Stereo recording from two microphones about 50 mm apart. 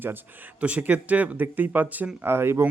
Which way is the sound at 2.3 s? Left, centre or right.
Right.